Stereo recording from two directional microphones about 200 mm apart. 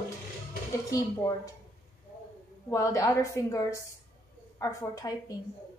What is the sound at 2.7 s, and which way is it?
A woman's voice, 15° left (ahead or behind).